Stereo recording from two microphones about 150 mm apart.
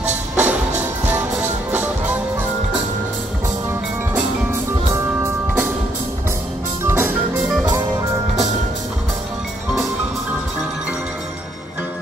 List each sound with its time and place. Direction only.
0.4 s music: 10° right (ahead or behind)
4.1 s music: 15° right (ahead or behind)
6.8 s music: 15° right (ahead or behind)